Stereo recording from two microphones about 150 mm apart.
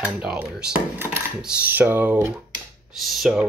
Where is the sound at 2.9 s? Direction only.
Centre (ahead or behind).